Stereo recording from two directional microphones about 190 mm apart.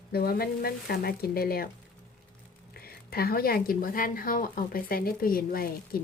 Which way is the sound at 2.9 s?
55° left (ahead or behind).